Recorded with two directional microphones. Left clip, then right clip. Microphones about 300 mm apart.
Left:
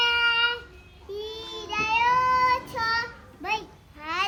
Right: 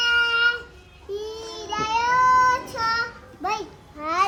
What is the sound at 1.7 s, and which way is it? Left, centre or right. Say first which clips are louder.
Child singing: right 1 dB; centre.